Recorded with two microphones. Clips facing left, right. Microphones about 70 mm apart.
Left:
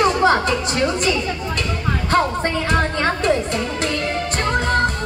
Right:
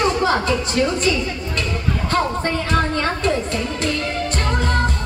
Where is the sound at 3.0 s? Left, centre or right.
Left.